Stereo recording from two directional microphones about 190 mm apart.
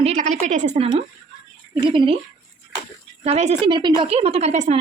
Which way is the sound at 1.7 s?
25° right (ahead or behind).